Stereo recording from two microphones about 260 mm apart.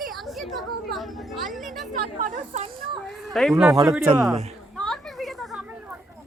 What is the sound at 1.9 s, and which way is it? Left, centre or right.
Speech, right.